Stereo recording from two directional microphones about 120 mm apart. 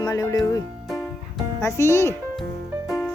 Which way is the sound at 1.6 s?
25° left (ahead or behind).